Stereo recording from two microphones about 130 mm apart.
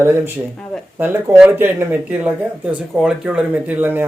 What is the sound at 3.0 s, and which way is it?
Speech, 5° right (ahead or behind).